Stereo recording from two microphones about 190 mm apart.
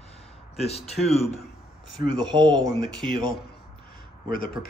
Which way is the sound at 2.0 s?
25° right (ahead or behind).